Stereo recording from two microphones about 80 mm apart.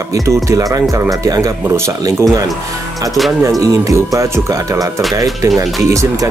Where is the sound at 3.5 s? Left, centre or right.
Right.